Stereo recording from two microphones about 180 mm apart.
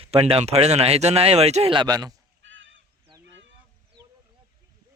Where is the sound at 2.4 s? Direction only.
90° right.